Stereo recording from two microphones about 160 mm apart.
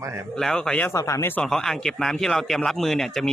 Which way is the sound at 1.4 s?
5° left (ahead or behind).